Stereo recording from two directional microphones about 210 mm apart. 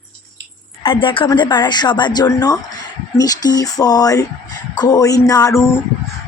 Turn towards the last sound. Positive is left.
turn(degrees=10)  # may be behind; listen again after turning